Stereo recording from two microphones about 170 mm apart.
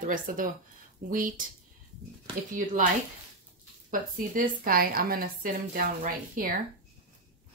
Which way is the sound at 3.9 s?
55° right (ahead or behind).